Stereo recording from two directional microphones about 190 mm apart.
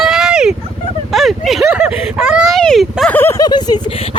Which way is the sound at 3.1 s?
15° left (ahead or behind).